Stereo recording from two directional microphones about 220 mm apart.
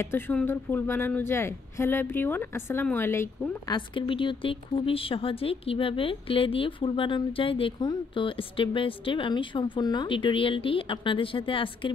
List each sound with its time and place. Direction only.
0.0 s speech: 10° left (ahead or behind)